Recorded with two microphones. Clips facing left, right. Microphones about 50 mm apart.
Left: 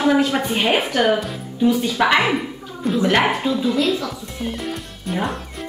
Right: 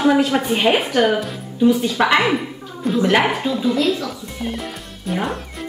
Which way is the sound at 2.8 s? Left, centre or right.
Centre.